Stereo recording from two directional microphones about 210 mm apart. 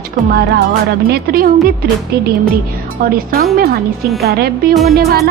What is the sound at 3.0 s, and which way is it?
A woman's voice, 45° right (ahead or behind).